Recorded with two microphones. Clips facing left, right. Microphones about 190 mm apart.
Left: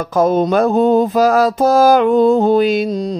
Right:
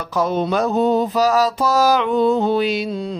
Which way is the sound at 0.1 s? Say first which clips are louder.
Left 6 dB; 45° left (ahead or behind).